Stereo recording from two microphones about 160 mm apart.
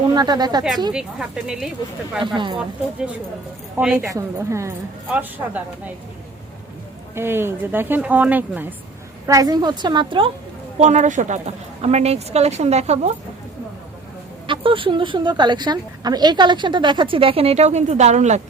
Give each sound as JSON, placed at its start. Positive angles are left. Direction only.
{"t": 0.1, "sound": "a woman's voice", "side_deg": -25}
{"t": 0.9, "sound": "speech", "side_deg": -5}
{"t": 2.2, "sound": "a woman's voice", "side_deg": -30}
{"t": 3.8, "sound": "a woman's voice", "side_deg": -15}
{"t": 7.2, "sound": "a woman's voice", "side_deg": -15}
{"t": 9.2, "sound": "a woman's voice", "side_deg": -20}
{"t": 10.8, "sound": "a woman's voice", "side_deg": -45}
{"t": 14.4, "sound": "a woman's voice", "side_deg": -30}